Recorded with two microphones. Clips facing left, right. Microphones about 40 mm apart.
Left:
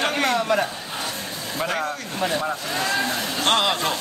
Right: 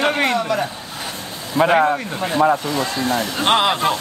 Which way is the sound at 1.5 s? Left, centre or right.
Right.